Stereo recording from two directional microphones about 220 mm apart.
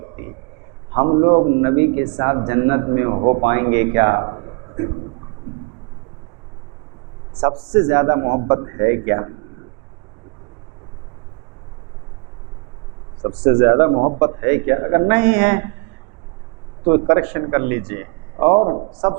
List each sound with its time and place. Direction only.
0.9 s a man's voice: 25° right (ahead or behind)
7.3 s a man's voice: 20° right (ahead or behind)
13.2 s a man's voice: 20° right (ahead or behind)
16.8 s a man's voice: 15° right (ahead or behind)